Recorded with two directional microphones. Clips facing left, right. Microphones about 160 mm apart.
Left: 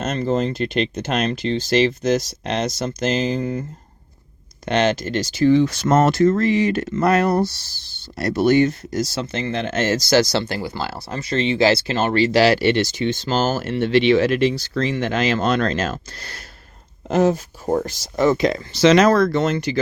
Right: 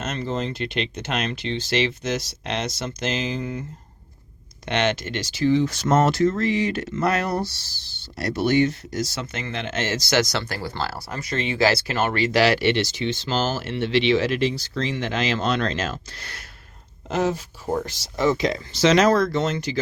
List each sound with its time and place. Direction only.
0.0 s speech: 40° left (ahead or behind)
4.6 s speech: 40° left (ahead or behind); by 19.8 s 60° left (ahead or behind)